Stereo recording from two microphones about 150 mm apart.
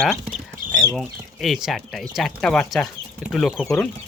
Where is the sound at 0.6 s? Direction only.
65° right (ahead or behind).